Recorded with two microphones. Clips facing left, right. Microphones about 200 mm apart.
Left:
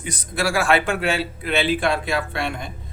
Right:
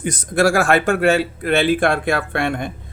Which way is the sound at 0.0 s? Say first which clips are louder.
Right 8 dB; 45° right (ahead or behind).